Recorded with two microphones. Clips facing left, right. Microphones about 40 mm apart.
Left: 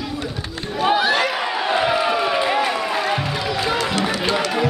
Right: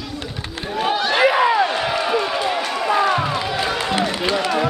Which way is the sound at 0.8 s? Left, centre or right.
Centre.